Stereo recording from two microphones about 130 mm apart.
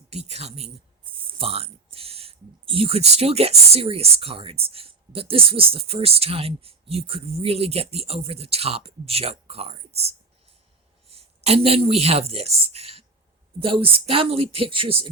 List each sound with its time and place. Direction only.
0.1 s speech: 55° right (ahead or behind)